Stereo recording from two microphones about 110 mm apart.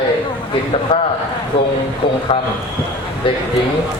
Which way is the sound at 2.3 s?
55° left (ahead or behind).